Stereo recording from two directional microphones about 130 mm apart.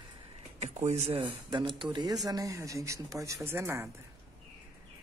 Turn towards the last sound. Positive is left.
turn(degrees=-20)  # may be behind; listen again after turning